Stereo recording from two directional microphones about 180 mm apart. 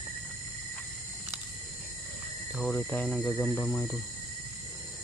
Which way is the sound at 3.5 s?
15° left (ahead or behind).